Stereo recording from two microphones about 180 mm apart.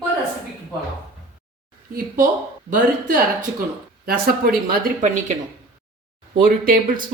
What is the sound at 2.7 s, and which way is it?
Speech, 50° right (ahead or behind).